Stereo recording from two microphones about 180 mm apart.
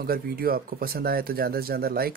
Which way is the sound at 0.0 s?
55° right (ahead or behind).